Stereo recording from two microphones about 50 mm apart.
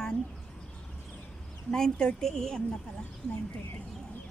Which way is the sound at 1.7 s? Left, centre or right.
Centre.